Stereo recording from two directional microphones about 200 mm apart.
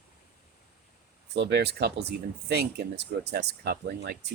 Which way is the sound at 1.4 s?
55° right (ahead or behind).